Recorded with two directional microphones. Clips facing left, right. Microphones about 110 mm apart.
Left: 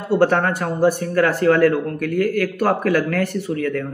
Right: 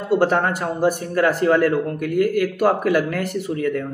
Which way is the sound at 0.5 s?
15° right (ahead or behind).